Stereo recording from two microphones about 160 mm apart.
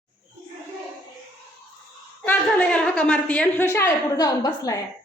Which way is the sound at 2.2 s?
10° left (ahead or behind).